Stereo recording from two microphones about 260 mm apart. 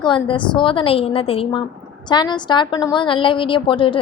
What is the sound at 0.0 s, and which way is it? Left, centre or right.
A woman's voice, centre.